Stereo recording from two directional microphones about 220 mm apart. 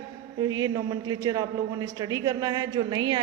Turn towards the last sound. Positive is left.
turn(degrees=-20)  # may be behind; listen again after turning